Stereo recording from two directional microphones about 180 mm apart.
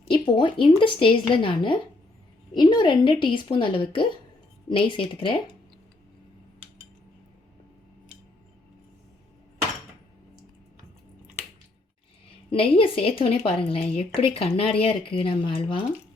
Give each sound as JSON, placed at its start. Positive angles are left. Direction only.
{"t": 0.1, "sound": "a woman's voice", "side_deg": 30}
{"t": 12.5, "sound": "a woman's voice", "side_deg": 30}